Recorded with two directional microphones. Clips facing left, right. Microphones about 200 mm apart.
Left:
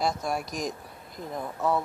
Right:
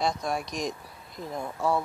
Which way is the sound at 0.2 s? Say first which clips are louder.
Even; 5° left (ahead or behind).